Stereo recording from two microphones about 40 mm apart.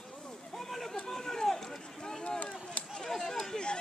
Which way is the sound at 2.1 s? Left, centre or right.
Centre.